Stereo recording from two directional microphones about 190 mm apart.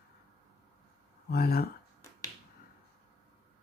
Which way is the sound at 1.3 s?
55° left (ahead or behind).